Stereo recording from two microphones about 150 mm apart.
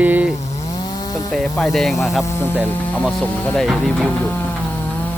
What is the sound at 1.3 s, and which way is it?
Speech, centre (ahead or behind).